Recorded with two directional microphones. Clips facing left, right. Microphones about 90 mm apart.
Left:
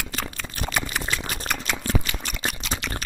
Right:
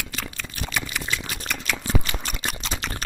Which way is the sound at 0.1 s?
40° left (ahead or behind).